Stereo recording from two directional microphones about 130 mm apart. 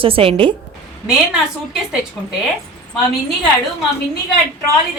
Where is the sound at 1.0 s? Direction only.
5° right (ahead or behind).